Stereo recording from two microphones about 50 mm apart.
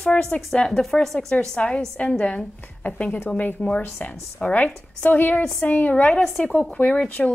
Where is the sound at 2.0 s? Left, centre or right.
Left.